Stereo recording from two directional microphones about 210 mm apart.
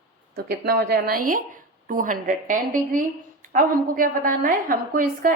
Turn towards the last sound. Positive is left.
turn(degrees=-40)  # may be behind; listen again after turning